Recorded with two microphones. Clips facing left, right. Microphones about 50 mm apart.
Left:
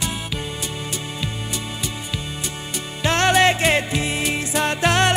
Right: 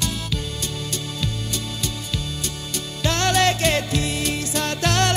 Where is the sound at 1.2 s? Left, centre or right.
Centre.